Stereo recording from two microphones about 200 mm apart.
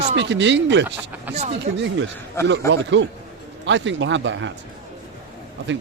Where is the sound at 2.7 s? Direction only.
65° right (ahead or behind).